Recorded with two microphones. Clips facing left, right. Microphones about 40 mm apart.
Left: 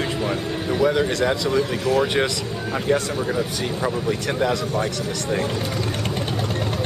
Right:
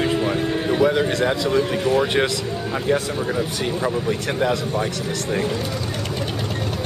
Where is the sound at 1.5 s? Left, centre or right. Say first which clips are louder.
Right 2 dB; right.